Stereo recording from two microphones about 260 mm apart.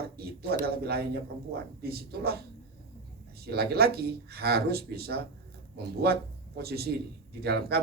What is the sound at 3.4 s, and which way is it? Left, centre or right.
A man's voice, right.